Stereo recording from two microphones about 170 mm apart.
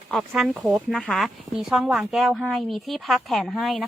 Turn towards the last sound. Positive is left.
turn(degrees=0)  # may be behind; listen again after turning